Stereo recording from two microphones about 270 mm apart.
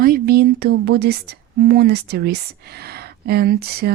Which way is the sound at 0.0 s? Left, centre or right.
Right.